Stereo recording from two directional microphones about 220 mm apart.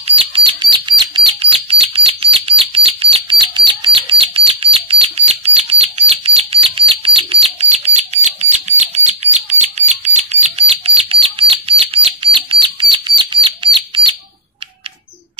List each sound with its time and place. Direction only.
0.0 s bird: 25° right (ahead or behind)